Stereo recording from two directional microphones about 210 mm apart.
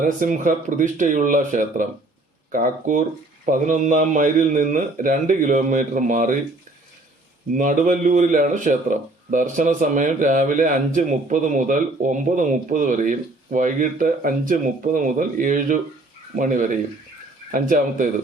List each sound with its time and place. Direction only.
0.0 s speech: 40° right (ahead or behind)
7.5 s speech: 40° right (ahead or behind)